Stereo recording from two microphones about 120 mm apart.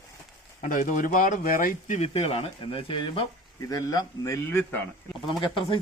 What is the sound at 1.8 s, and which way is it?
Speech, 70° left (ahead or behind).